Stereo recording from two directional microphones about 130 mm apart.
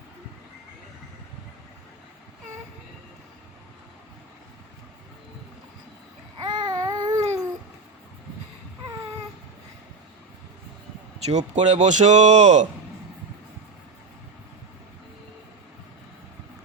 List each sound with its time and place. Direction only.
6.4 s babbling: 35° right (ahead or behind)
11.3 s speech: 60° right (ahead or behind)